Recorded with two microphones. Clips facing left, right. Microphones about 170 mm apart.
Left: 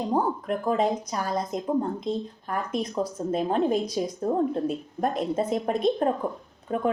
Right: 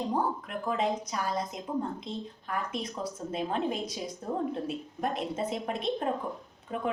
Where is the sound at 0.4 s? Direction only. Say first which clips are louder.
Left 6 dB; 40° left (ahead or behind).